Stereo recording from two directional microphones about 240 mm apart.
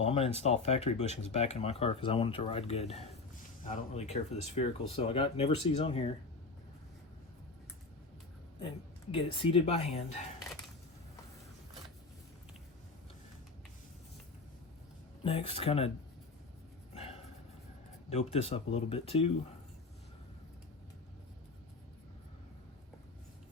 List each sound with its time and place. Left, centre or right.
0.0 s speech: left
9.1 s speech: left
15.2 s speech: left
16.9 s a sound: left
18.1 s speech: left